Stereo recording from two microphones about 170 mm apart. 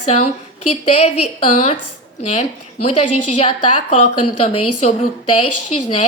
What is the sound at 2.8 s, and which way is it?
A woman's voice, 40° left (ahead or behind).